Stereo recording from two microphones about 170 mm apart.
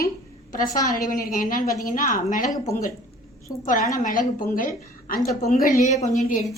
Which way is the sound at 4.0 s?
50° left (ahead or behind).